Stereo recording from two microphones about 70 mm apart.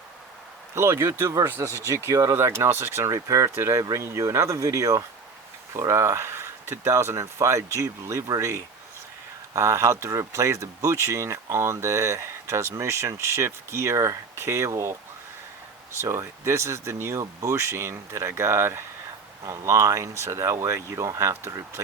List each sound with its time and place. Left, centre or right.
0.8 s speech: right
3.2 s speech: right
16.0 s speech: right